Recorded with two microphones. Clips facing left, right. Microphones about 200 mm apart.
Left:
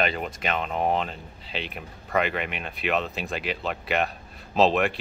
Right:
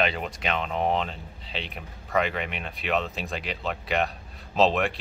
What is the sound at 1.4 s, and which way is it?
Speech, 5° left (ahead or behind).